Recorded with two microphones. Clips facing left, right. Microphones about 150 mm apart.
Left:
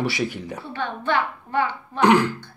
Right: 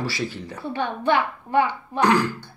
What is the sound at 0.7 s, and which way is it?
A woman's voice, 15° right (ahead or behind).